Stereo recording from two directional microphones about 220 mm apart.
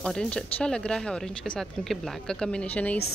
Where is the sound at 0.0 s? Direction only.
5° left (ahead or behind).